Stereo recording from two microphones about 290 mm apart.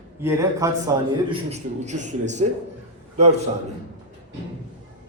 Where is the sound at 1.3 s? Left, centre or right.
Right.